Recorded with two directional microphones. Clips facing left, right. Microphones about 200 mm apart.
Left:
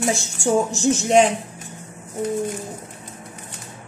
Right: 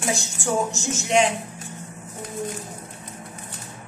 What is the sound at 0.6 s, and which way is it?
Speech, 35° left (ahead or behind).